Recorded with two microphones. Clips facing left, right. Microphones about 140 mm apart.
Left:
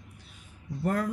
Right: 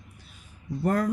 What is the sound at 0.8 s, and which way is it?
Speech, 45° right (ahead or behind).